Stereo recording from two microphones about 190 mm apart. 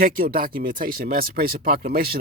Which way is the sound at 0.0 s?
50° right (ahead or behind).